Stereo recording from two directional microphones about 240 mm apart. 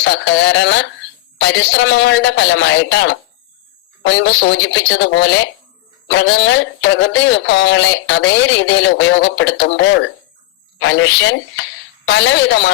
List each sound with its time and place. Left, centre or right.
0.0 s speech: left